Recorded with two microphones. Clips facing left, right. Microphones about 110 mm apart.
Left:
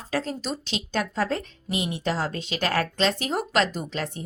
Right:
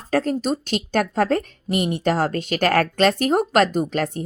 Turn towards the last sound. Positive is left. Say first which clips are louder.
# right 9 dB
turn(degrees=-50)  # may be behind; listen again after turning